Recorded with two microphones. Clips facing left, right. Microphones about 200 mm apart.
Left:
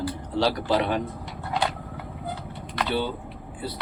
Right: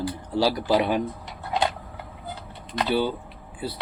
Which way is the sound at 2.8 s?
10° right (ahead or behind).